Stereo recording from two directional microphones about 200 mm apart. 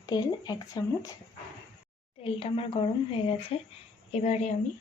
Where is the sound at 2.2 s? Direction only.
30° left (ahead or behind).